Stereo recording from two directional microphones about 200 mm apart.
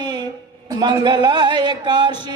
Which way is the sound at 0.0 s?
20° right (ahead or behind).